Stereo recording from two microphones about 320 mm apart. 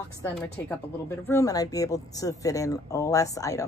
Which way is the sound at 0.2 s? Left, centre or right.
Centre.